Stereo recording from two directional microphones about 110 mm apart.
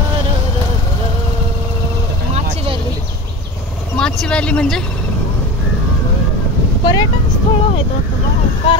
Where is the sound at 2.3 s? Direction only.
70° right (ahead or behind).